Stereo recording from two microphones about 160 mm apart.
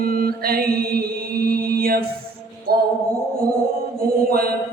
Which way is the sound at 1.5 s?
70° right (ahead or behind).